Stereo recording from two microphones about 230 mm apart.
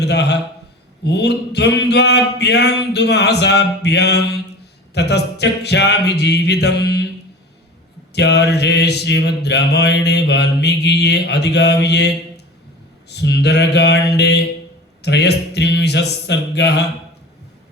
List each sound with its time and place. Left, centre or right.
0.0 s mantra: left
8.1 s mantra: left